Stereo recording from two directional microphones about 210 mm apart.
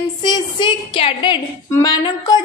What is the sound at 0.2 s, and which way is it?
A woman's voice, 20° left (ahead or behind).